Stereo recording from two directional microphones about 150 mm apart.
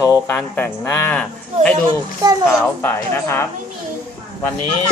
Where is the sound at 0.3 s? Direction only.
10° left (ahead or behind).